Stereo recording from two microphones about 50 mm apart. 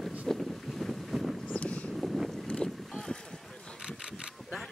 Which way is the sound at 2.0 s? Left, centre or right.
Centre.